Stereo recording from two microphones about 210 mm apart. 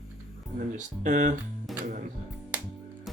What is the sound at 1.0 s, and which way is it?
Speech, 35° right (ahead or behind).